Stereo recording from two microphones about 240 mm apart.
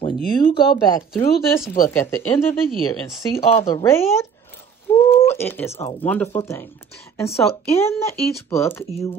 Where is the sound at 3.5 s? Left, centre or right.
Left.